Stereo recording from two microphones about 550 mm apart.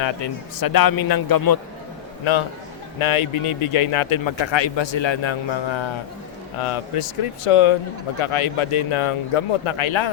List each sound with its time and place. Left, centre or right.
0.0 s a man's voice: left
3.0 s speech: left
6.6 s speech: left